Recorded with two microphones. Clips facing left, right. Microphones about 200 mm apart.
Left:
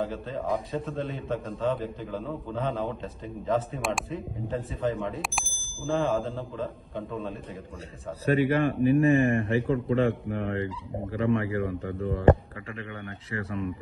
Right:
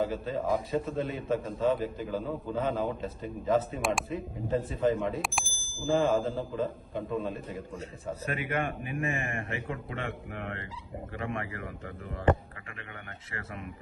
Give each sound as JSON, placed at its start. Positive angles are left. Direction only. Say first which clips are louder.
{"t": 0.0, "sound": "a man's voice", "louder": "right 1 dB", "side_deg": 0}
{"t": 8.3, "sound": "a man's voice", "louder": "left 10 dB", "side_deg": 35}